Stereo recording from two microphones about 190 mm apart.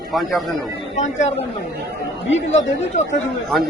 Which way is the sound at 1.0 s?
40° left (ahead or behind).